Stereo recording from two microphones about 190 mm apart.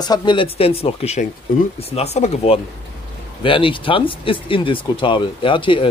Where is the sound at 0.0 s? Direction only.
20° left (ahead or behind).